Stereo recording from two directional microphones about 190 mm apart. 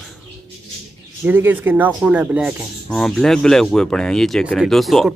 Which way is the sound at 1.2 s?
10° right (ahead or behind).